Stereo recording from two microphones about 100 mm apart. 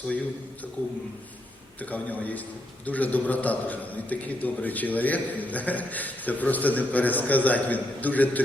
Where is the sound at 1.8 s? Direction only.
15° left (ahead or behind).